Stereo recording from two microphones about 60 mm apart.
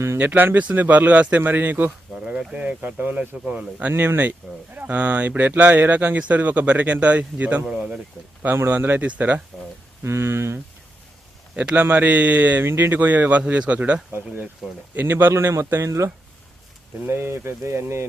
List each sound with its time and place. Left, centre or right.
0.2 s speech: right
2.2 s speech: centre
3.9 s speech: right
8.7 s speech: right
10.0 s speech: right
11.5 s speech: right
12.6 s speech: right
13.4 s speech: centre; by 16.1 s right
17.1 s speech: right